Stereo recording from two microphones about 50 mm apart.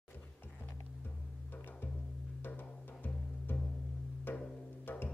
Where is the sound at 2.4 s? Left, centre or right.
Left.